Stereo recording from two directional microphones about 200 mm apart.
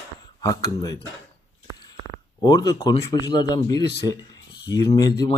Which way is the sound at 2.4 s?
20° left (ahead or behind).